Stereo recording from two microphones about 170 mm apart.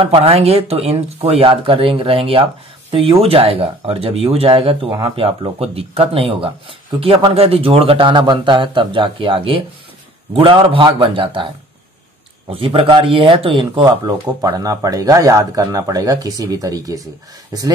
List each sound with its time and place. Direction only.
0.0 s speech: 35° right (ahead or behind)
12.4 s speech: 30° right (ahead or behind)